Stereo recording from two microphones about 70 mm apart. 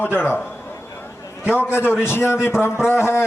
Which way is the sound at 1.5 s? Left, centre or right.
Left.